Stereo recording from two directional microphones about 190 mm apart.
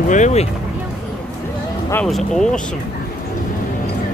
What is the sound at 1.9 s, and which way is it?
Speech, 5° left (ahead or behind).